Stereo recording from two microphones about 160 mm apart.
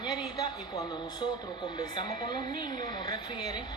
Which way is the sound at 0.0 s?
25° left (ahead or behind).